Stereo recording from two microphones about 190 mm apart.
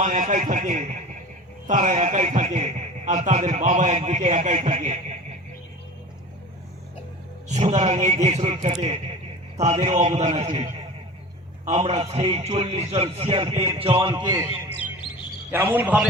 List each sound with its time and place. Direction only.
0.0 s a man's voice: 40° right (ahead or behind)
7.4 s a man's voice: 40° right (ahead or behind); by 16.0 s 10° right (ahead or behind)